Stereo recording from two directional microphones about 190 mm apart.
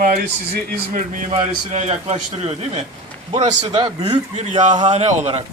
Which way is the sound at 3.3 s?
30° right (ahead or behind).